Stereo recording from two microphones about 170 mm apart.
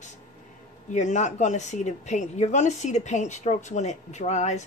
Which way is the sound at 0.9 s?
45° left (ahead or behind).